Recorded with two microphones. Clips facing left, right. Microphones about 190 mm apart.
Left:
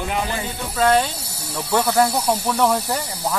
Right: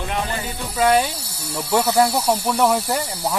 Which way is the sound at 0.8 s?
10° right (ahead or behind).